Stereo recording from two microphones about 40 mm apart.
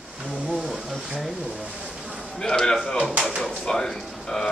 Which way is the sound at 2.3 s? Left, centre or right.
Centre.